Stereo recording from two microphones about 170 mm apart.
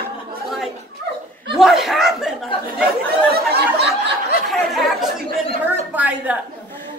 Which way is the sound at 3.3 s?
70° right (ahead or behind).